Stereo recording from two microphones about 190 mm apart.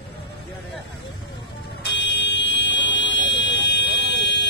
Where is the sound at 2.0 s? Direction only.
65° left (ahead or behind).